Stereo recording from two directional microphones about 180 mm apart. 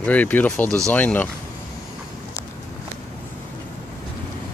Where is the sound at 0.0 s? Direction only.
10° left (ahead or behind).